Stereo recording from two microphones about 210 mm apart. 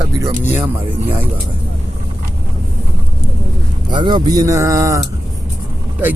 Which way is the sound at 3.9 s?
20° right (ahead or behind).